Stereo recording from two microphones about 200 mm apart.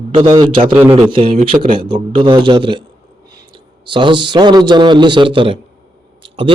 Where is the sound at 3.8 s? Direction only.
25° right (ahead or behind).